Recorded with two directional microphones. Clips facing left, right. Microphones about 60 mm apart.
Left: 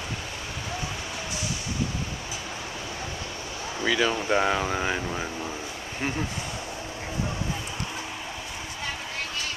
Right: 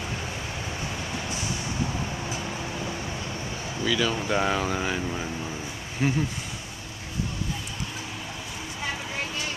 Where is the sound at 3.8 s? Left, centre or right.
Left.